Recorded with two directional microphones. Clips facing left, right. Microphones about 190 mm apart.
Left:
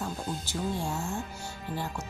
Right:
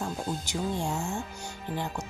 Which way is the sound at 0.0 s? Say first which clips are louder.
Right 2 dB; 15° right (ahead or behind).